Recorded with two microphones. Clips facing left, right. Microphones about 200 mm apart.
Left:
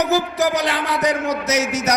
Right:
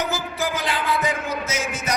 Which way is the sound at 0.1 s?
70° left (ahead or behind).